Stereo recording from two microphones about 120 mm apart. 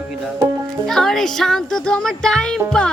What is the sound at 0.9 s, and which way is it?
Music, 5° left (ahead or behind).